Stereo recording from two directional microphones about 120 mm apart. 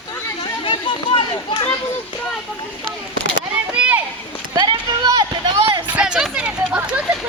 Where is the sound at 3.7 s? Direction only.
10° right (ahead or behind).